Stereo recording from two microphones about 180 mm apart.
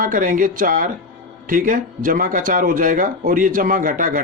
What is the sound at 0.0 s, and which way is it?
Speech, 50° right (ahead or behind).